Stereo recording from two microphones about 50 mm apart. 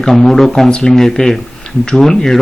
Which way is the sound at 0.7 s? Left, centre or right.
Centre.